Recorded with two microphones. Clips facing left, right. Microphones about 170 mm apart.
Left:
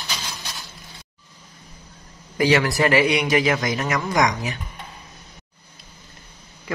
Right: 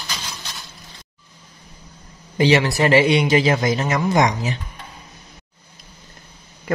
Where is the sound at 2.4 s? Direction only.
25° right (ahead or behind).